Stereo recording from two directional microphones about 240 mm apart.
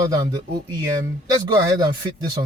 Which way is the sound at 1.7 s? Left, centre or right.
Centre.